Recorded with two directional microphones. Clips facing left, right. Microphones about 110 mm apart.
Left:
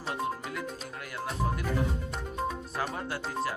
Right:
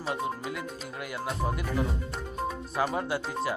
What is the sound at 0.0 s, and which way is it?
Music, centre (ahead or behind).